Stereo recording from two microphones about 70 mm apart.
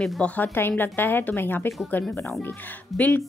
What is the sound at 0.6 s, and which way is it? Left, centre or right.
A woman's voice, left.